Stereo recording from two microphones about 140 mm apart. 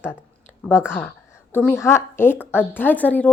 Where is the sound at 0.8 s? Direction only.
15° left (ahead or behind).